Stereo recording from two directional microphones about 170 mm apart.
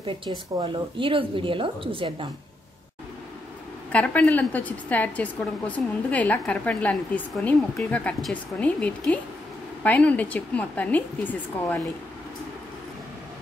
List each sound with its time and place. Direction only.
0.6 s a woman's voice: 30° right (ahead or behind)
3.9 s a woman's voice: 10° left (ahead or behind)